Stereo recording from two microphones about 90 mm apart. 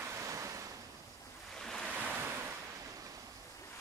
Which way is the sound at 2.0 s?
20° right (ahead or behind).